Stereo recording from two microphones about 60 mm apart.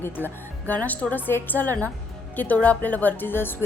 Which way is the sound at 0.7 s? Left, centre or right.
Left.